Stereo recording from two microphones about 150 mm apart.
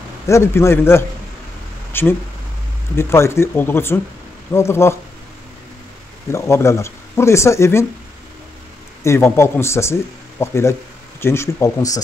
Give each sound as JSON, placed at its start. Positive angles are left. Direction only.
{"t": 0.3, "sound": "speech", "side_deg": 15}
{"t": 6.3, "sound": "speech", "side_deg": 20}
{"t": 9.0, "sound": "speech", "side_deg": 20}